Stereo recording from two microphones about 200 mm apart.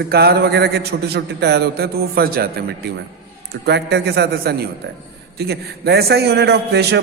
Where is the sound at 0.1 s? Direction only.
55° right (ahead or behind).